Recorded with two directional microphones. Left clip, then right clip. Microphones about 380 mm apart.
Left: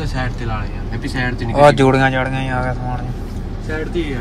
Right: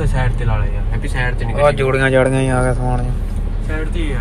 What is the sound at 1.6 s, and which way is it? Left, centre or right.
Speech, centre.